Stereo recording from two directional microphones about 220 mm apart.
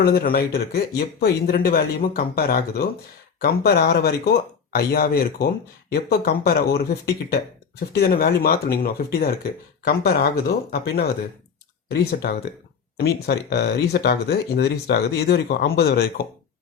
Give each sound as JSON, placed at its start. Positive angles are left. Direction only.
{"t": 0.0, "sound": "speech", "side_deg": 40}